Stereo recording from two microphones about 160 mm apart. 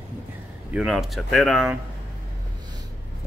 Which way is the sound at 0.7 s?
5° right (ahead or behind).